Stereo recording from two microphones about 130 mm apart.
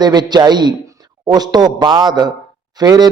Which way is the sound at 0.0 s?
30° right (ahead or behind).